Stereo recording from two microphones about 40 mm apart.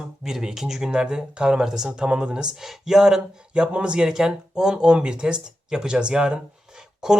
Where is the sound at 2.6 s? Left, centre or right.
Centre; by 3.9 s right.